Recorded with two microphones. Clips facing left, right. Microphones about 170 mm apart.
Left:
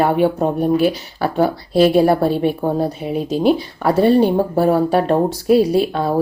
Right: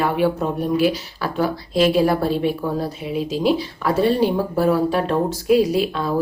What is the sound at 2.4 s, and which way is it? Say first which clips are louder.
Speech: left 4 dB; 50° left (ahead or behind).